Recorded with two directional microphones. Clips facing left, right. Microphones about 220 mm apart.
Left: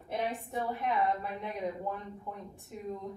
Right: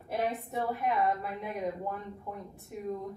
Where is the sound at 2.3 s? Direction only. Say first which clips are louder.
Right 2 dB; 5° right (ahead or behind).